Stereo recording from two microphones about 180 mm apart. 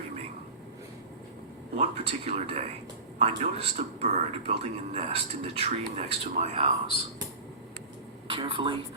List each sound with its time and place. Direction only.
1.7 s speech: 35° right (ahead or behind)
8.3 s a woman's voice: 30° right (ahead or behind)